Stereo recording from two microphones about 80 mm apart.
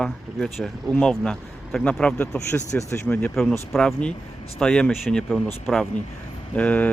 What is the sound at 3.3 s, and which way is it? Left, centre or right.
Speech, centre.